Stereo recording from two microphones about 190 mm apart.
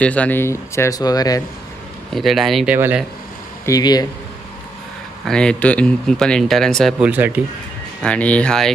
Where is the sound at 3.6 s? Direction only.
20° left (ahead or behind).